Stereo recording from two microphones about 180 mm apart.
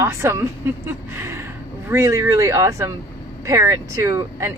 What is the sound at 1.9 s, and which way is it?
Speech, 15° right (ahead or behind).